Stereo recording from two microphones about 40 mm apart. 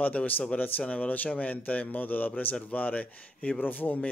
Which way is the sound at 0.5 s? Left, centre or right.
Left.